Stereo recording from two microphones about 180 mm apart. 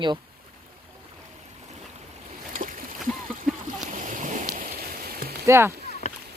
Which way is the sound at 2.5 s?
50° right (ahead or behind).